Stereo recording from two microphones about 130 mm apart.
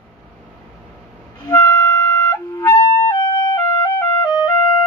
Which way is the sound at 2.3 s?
25° left (ahead or behind).